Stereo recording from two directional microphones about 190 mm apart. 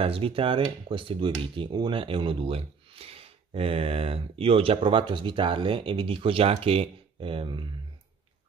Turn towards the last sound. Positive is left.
turn(degrees=-25)  # may be behind; listen again after turning